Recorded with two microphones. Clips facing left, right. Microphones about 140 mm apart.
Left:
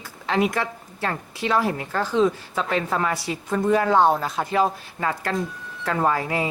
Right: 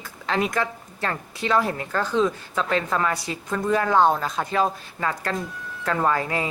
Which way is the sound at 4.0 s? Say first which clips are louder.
Left 1 dB; 5° left (ahead or behind).